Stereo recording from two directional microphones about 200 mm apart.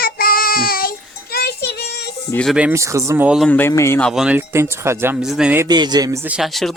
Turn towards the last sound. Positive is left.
turn(degrees=0)  # may be behind; listen again after turning